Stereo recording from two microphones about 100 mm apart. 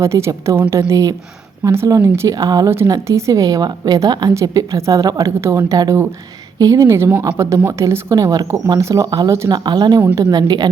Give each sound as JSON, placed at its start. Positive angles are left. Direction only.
{"t": 0.0, "sound": "a woman's voice", "side_deg": -30}
{"t": 8.4, "sound": "a woman's voice", "side_deg": -25}
{"t": 9.6, "sound": "a woman's voice", "side_deg": -45}